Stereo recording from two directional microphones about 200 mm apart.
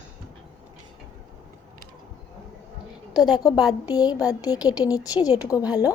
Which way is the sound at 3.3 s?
20° left (ahead or behind).